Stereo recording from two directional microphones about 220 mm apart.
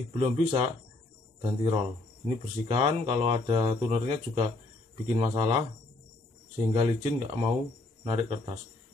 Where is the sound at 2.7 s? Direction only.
30° right (ahead or behind).